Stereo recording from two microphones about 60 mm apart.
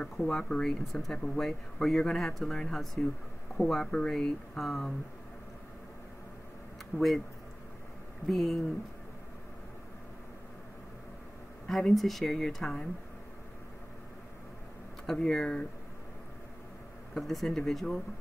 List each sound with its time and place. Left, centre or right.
0.0 s speech: centre
6.9 s speech: left
8.3 s speech: centre
11.6 s speech: centre
15.0 s speech: centre
17.1 s speech: centre